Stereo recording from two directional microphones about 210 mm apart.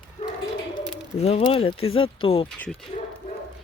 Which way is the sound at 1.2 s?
30° left (ahead or behind).